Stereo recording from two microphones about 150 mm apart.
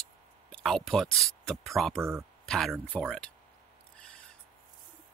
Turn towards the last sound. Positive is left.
turn(degrees=5)  # may be behind; listen again after turning